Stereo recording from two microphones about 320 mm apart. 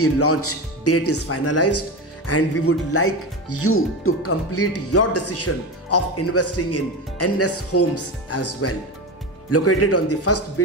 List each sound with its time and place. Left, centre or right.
0.0 s speech: left